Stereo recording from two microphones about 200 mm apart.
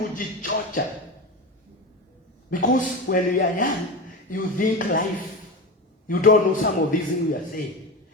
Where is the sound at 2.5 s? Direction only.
40° left (ahead or behind).